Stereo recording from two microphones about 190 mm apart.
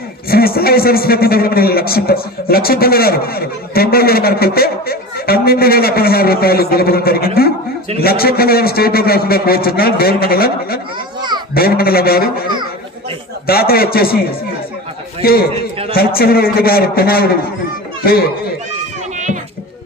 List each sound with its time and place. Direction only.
0.3 s a man's voice: 50° left (ahead or behind)
13.5 s a man's voice: 55° left (ahead or behind)